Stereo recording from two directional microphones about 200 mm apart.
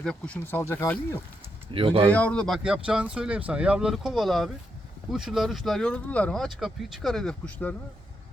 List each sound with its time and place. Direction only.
0.0 s speech: 5° left (ahead or behind)
1.7 s speech: 25° right (ahead or behind)
2.1 s speech: 5° left (ahead or behind)